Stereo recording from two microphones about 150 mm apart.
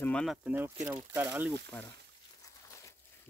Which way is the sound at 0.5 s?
15° right (ahead or behind).